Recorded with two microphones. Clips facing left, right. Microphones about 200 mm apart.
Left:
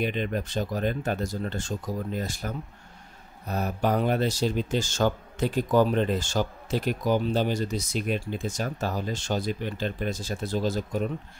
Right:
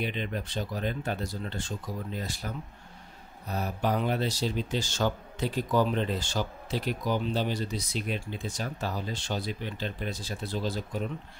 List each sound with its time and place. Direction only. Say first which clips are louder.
0.0 s speech: left 5 dB; 45° left (ahead or behind)